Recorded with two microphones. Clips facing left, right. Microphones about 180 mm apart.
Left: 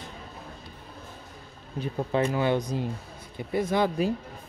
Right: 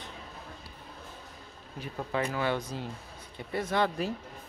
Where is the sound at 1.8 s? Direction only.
25° left (ahead or behind).